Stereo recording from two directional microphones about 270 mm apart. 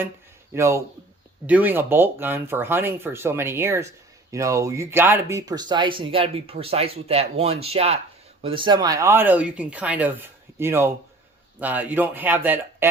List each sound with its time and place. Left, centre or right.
0.5 s speech: centre